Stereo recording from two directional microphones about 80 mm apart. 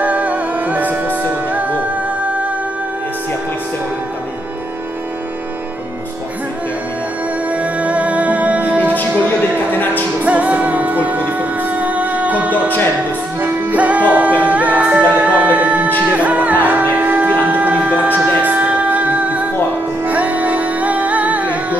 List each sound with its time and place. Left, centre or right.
0.0 s music: centre
7.4 s music: centre
10.2 s music: centre
12.4 s music: left
13.4 s music: centre
16.9 s a sound: right
20.1 s music: centre